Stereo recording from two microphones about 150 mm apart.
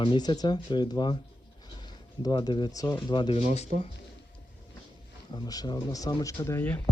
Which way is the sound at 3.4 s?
45° left (ahead or behind).